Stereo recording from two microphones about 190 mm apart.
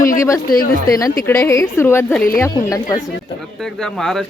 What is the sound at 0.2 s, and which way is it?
A woman's voice, 15° left (ahead or behind).